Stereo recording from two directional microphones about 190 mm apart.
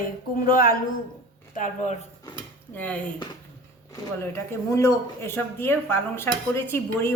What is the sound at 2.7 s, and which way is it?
Speech, 5° left (ahead or behind).